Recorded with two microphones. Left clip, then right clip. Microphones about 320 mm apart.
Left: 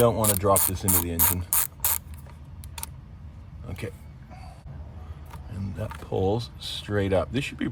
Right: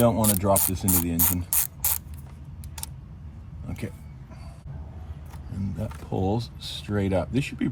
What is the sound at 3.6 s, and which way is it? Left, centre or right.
Vehicle, left.